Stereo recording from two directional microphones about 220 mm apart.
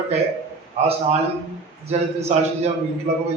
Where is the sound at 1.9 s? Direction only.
30° right (ahead or behind).